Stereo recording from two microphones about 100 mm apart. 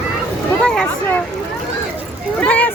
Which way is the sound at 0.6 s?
10° left (ahead or behind).